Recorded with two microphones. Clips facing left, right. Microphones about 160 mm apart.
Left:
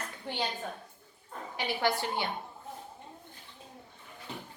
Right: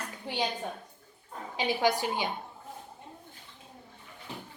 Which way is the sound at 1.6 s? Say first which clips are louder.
Right 3 dB; 15° right (ahead or behind).